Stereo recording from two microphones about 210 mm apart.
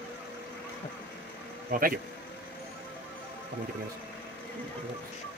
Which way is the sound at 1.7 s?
40° right (ahead or behind).